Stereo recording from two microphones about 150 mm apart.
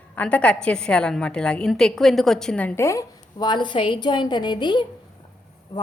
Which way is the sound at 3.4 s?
30° left (ahead or behind).